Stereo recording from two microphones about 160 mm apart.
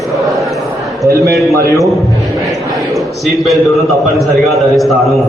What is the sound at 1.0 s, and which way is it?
Speech, 20° right (ahead or behind).